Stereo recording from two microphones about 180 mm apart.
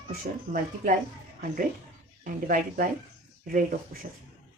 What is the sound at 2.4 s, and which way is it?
Speech, 50° right (ahead or behind).